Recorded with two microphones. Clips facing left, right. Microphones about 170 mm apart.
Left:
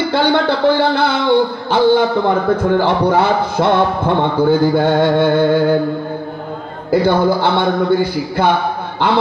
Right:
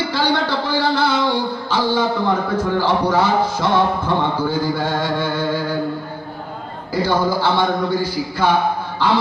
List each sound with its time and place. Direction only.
0.1 s speech: 55° left (ahead or behind)
6.9 s speech: 55° left (ahead or behind)